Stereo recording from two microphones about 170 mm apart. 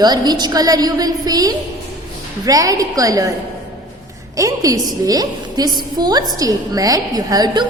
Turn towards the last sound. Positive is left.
turn(degrees=-20)  # may be behind; listen again after turning